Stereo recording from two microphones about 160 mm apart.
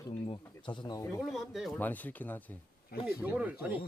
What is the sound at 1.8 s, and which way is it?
Speech, 10° left (ahead or behind).